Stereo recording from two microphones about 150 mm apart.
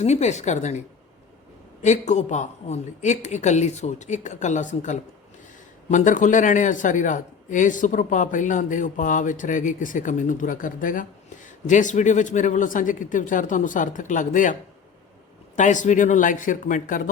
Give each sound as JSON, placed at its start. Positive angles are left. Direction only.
{"t": 0.0, "sound": "a woman's voice", "side_deg": 50}
{"t": 1.8, "sound": "a woman's voice", "side_deg": 50}
{"t": 15.5, "sound": "speech", "side_deg": 55}